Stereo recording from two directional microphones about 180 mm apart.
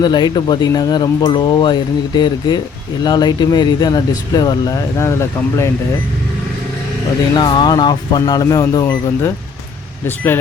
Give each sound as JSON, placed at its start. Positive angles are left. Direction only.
{"t": 0.0, "sound": "speech", "side_deg": 25}
{"t": 7.3, "sound": "speech", "side_deg": 25}